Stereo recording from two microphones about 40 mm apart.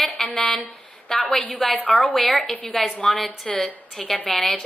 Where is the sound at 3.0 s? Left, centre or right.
Centre.